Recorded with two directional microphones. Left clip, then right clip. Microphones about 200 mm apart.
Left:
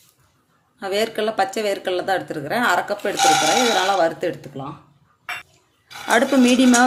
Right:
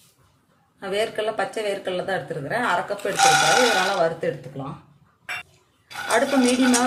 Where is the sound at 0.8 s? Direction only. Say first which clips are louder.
Left 3 dB; 50° left (ahead or behind).